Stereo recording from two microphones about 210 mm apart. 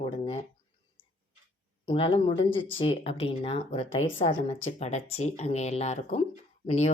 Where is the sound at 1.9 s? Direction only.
25° left (ahead or behind).